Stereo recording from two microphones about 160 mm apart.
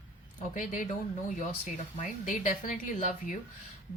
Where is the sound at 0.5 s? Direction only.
55° left (ahead or behind).